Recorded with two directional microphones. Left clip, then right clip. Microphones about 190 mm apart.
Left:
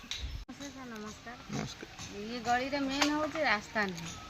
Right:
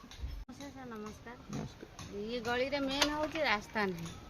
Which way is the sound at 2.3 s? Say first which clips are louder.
Left 3 dB; 40° right (ahead or behind).